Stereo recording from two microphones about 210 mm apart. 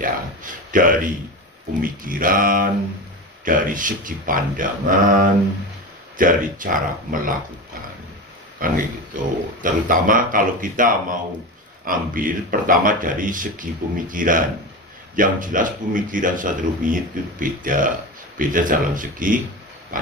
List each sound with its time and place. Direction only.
0.0 s speech: 40° right (ahead or behind)
6.1 s speech: 40° right (ahead or behind)
8.5 s speech: 40° right (ahead or behind)
19.9 s pig: 40° right (ahead or behind)